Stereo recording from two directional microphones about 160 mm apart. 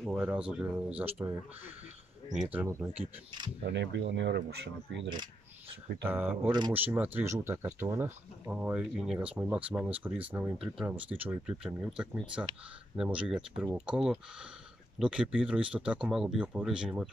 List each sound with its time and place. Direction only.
0.0 s speech: 5° right (ahead or behind)
2.3 s speech: 10° right (ahead or behind)
3.3 s speech: 30° right (ahead or behind)
3.6 s speech: 90° right
6.0 s speech: 10° right (ahead or behind)